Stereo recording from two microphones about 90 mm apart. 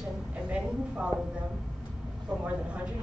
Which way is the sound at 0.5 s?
10° right (ahead or behind).